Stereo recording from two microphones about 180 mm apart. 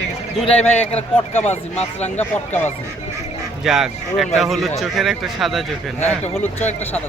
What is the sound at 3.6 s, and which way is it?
Speech, centre (ahead or behind).